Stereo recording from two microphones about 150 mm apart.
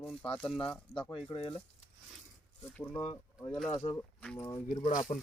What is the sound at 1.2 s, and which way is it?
Speech, 35° left (ahead or behind).